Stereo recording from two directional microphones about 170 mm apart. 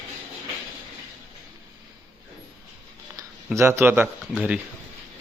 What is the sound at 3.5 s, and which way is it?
Speech, 15° right (ahead or behind).